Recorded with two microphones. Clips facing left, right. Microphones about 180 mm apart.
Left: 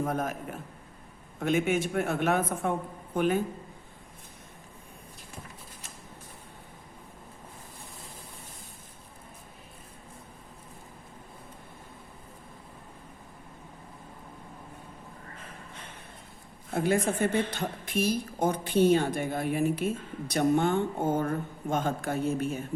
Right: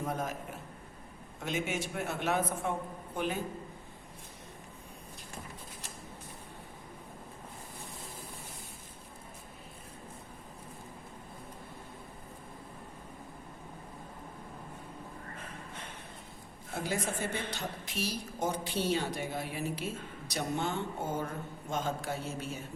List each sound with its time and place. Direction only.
0.0 s a man's voice: 55° left (ahead or behind)
1.4 s a man's voice: 55° left (ahead or behind)
16.7 s a woman's voice: 55° left (ahead or behind)